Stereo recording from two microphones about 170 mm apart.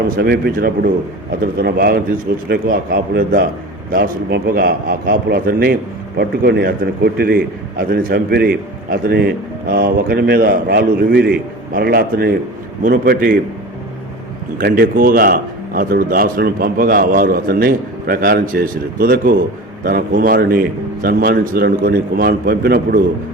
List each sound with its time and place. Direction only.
0.2 s a man's voice: 65° right (ahead or behind)
14.6 s a man's voice: 60° right (ahead or behind)